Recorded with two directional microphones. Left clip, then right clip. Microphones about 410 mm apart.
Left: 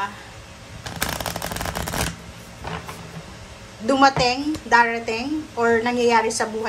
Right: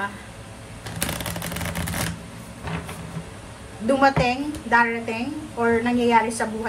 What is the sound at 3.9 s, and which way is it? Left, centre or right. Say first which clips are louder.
A woman's voice: left 2 dB; centre.